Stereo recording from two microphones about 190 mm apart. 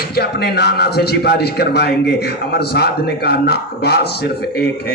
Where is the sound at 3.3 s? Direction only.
60° left (ahead or behind).